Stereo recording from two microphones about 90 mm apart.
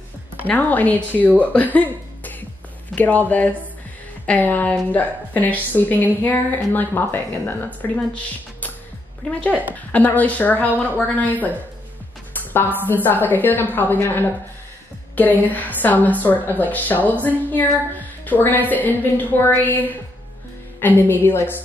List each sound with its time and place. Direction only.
0.5 s a woman's voice: 20° left (ahead or behind)
12.5 s a woman's voice: 20° left (ahead or behind)